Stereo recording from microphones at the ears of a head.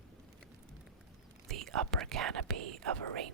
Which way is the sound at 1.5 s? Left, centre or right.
Right.